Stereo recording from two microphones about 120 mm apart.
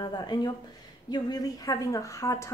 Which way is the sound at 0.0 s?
35° left (ahead or behind).